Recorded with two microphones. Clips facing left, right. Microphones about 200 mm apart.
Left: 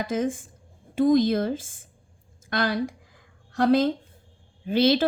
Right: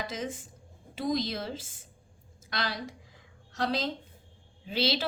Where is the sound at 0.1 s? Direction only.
50° left (ahead or behind).